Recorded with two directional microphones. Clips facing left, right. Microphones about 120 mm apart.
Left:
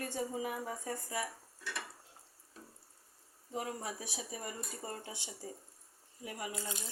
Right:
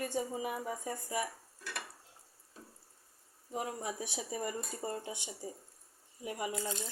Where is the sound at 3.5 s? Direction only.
20° right (ahead or behind).